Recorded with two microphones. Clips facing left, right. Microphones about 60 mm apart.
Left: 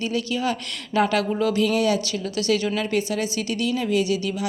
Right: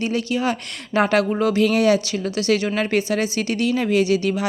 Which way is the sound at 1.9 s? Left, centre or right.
Right.